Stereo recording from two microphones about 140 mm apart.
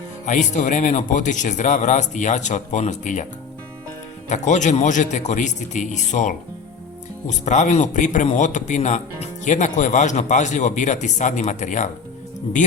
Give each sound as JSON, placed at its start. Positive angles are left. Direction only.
{"t": 0.3, "sound": "a man's voice", "side_deg": 60}
{"t": 4.3, "sound": "a man's voice", "side_deg": 60}